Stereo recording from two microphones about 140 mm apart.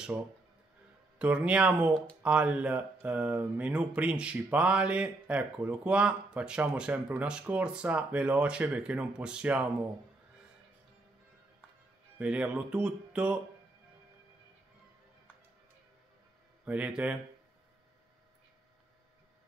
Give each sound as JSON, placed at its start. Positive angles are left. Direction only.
{"t": 1.1, "sound": "speech", "side_deg": -10}
{"t": 12.2, "sound": "speech", "side_deg": -10}
{"t": 16.6, "sound": "speech", "side_deg": -10}